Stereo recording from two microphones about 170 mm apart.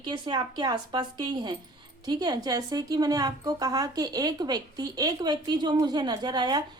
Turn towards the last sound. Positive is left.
turn(degrees=-25)  # may be behind; listen again after turning